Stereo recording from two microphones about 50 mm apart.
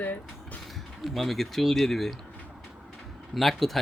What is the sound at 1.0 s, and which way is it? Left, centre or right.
Speech, centre.